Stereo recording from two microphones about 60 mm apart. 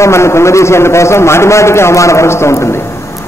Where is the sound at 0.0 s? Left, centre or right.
Left.